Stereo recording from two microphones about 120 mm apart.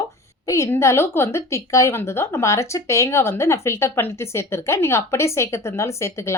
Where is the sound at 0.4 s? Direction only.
25° left (ahead or behind).